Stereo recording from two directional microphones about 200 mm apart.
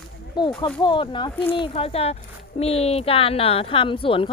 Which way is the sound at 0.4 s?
20° left (ahead or behind).